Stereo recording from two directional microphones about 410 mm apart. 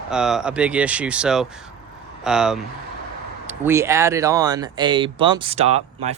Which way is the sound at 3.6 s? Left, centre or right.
Centre.